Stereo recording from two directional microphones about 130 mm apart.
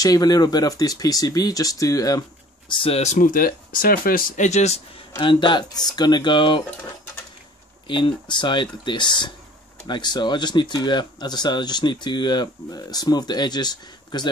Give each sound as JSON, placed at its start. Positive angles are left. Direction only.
{"t": 0.0, "sound": "speech", "side_deg": 30}
{"t": 2.7, "sound": "speech", "side_deg": 45}
{"t": 5.2, "sound": "speech", "side_deg": 40}
{"t": 7.8, "sound": "speech", "side_deg": 40}